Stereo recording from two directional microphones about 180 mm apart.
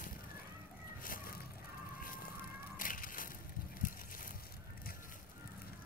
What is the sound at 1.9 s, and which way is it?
Music, 50° left (ahead or behind).